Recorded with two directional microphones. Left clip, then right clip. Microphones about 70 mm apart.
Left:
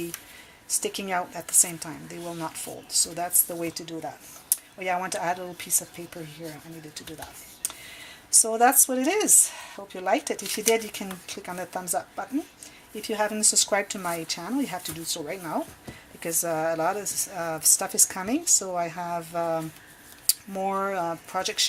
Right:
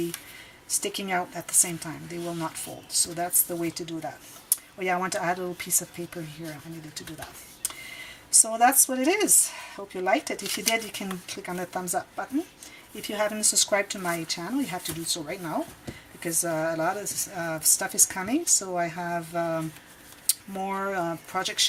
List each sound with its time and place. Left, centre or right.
0.8 s a woman's voice: left
2.9 s speech: left
8.3 s a woman's voice: left